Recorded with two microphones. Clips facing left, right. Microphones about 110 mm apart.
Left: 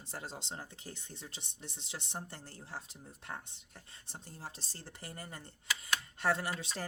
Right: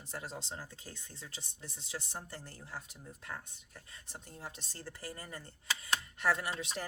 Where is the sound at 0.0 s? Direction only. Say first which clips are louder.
Right 1 dB; 30° left (ahead or behind).